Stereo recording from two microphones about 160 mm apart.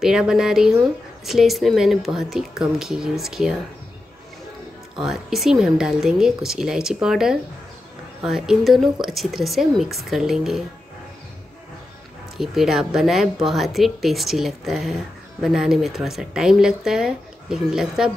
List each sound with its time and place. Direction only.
0.0 s speech: 5° right (ahead or behind)
4.9 s speech: centre (ahead or behind)
12.4 s speech: centre (ahead or behind)